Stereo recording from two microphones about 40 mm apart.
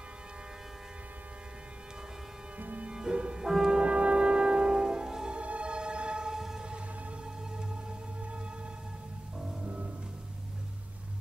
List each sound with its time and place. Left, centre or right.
2.6 s music: right
2.9 s music: right
3.4 s music: centre
3.7 s music: right
5.4 s music: right; by 6.7 s centre
9.4 s music: centre